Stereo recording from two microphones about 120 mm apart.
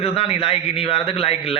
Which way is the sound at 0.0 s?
50° left (ahead or behind).